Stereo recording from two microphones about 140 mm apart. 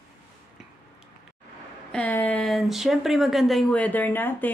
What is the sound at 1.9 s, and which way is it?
Speech, 10° left (ahead or behind).